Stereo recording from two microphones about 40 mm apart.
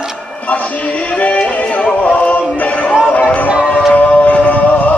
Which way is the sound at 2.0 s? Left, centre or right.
Left.